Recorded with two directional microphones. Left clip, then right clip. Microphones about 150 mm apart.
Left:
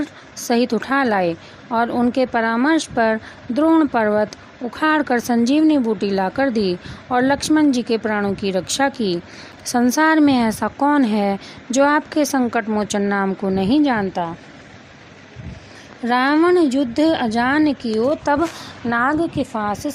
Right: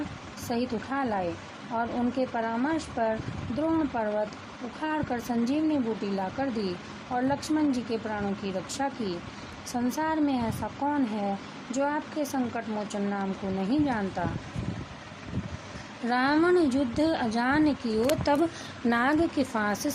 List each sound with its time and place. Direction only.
0.4 s a woman's voice: 55° left (ahead or behind)
16.0 s speech: 40° left (ahead or behind)
18.9 s a woman's voice: centre (ahead or behind)
19.4 s a woman's voice: 15° left (ahead or behind)